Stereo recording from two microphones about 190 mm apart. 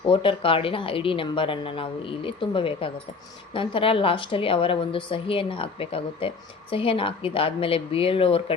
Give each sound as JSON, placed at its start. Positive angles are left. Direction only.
{"t": 0.1, "sound": "a woman's voice", "side_deg": 30}